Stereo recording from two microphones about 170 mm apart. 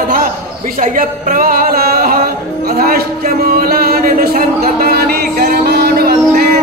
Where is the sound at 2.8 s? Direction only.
60° right (ahead or behind).